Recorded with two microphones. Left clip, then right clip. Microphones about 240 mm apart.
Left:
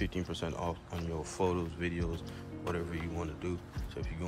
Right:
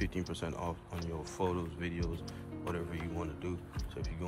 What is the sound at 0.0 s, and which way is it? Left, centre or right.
Speech, centre.